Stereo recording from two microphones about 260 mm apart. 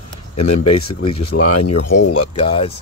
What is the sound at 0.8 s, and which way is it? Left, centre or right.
Speech, left.